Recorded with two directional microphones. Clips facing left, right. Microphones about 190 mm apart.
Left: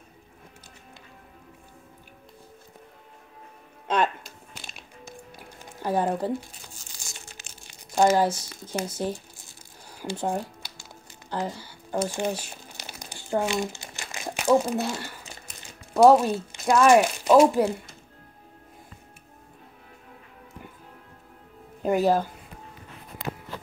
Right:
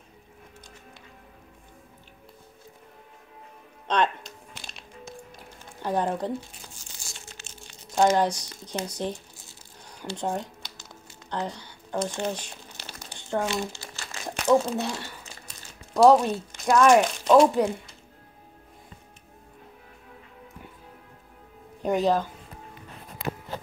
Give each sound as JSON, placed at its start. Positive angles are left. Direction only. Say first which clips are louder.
{"t": 3.8, "sound": "music", "louder": "even", "side_deg": 5}
{"t": 5.8, "sound": "speech", "louder": "left 1 dB", "side_deg": 10}
{"t": 7.3, "sound": "speech", "louder": "right 2 dB", "side_deg": 15}
{"t": 11.2, "sound": "crumpling", "louder": "left 1 dB", "side_deg": 5}
{"t": 15.9, "sound": "speech", "louder": "left 1 dB", "side_deg": 5}
{"t": 21.8, "sound": "speech", "louder": "left 1 dB", "side_deg": 5}